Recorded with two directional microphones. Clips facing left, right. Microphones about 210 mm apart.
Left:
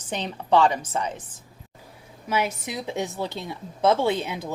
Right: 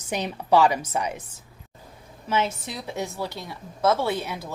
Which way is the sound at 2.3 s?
15° left (ahead or behind).